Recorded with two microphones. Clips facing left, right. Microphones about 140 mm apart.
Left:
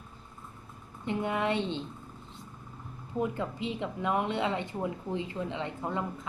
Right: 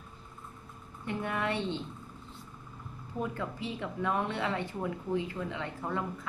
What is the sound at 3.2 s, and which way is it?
A woman's voice, 20° left (ahead or behind).